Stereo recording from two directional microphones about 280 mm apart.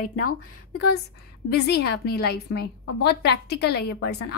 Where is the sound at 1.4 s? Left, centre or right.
Left.